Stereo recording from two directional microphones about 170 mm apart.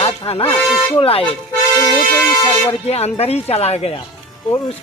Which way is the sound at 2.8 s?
35° left (ahead or behind).